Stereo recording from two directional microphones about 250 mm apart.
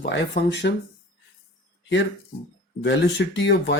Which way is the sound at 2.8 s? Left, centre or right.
Left.